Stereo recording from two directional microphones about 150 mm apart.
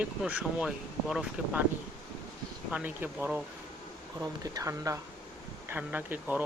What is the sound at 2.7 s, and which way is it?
Speech, 10° right (ahead or behind).